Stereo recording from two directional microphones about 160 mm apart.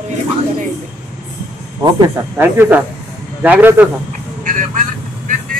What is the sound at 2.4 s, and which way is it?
Speech, 10° right (ahead or behind).